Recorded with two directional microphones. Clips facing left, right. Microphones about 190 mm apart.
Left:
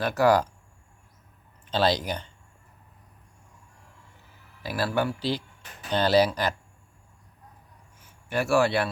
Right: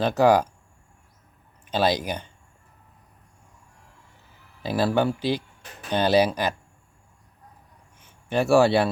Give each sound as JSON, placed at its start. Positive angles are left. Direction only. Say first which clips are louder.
{"t": 0.0, "sound": "speech", "louder": "right 3 dB", "side_deg": -20}
{"t": 1.6, "sound": "speech", "louder": "right 1 dB", "side_deg": -15}
{"t": 4.6, "sound": "speech", "louder": "right 5 dB", "side_deg": -25}
{"t": 8.0, "sound": "a man's voice", "louder": "right 4 dB", "side_deg": -25}